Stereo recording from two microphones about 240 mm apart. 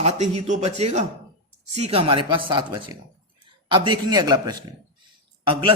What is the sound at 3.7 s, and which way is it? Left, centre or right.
A man's voice, centre.